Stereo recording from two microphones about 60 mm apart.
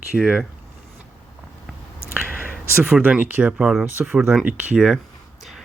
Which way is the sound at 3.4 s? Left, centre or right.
Centre.